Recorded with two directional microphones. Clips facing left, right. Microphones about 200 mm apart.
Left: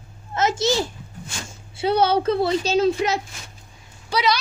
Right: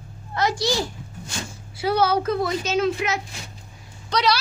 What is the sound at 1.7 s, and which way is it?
A woman's voice, 25° left (ahead or behind).